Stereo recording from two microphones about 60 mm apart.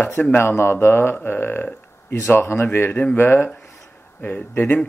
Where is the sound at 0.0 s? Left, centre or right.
Left.